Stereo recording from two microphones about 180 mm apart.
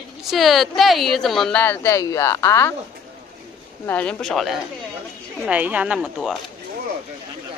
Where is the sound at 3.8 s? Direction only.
5° left (ahead or behind).